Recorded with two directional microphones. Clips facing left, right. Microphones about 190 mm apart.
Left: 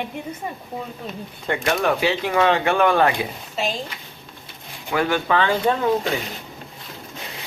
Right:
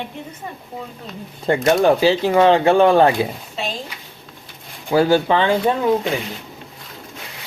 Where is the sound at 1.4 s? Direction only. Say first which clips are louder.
Right 7 dB; 35° right (ahead or behind).